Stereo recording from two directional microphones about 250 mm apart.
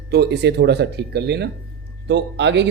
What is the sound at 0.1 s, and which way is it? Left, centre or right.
A man's voice, right.